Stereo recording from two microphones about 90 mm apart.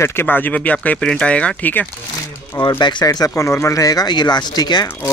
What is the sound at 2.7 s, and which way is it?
Speech, 50° left (ahead or behind).